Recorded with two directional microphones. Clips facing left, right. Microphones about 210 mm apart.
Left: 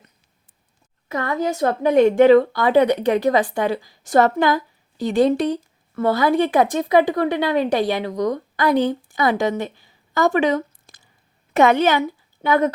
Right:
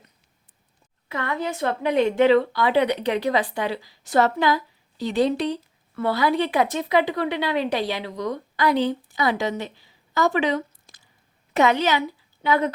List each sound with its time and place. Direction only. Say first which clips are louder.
1.0 s a woman's voice: left 5 dB; 45° left (ahead or behind)